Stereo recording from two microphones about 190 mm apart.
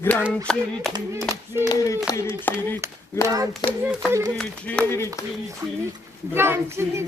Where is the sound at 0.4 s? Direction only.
Centre (ahead or behind).